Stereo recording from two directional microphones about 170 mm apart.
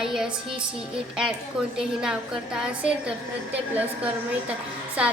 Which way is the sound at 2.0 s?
5° right (ahead or behind).